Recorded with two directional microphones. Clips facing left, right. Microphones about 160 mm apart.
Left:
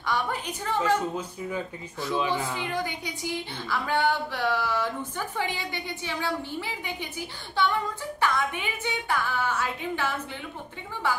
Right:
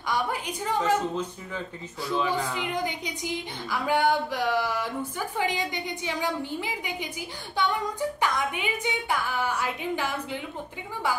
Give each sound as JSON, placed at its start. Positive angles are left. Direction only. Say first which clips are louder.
{"t": 0.0, "sound": "a woman's voice", "louder": "even", "side_deg": -10}
{"t": 2.1, "sound": "speech", "louder": "right 1 dB", "side_deg": 10}
{"t": 2.5, "sound": "a woman's voice", "louder": "right 1 dB", "side_deg": -15}